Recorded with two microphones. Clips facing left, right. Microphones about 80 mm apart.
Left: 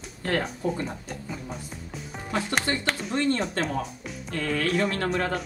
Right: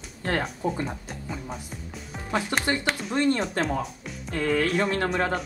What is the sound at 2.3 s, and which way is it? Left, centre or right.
Speech, right.